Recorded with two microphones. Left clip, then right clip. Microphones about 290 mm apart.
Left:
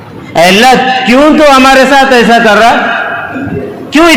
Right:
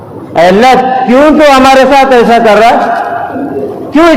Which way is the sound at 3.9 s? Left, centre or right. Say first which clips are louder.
Even; left.